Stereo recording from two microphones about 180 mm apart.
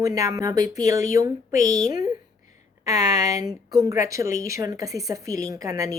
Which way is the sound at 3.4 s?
20° right (ahead or behind).